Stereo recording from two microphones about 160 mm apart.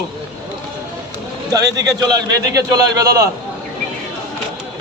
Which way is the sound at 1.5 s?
20° right (ahead or behind).